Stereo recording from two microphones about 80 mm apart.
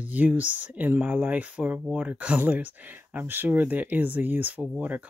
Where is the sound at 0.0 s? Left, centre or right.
Right.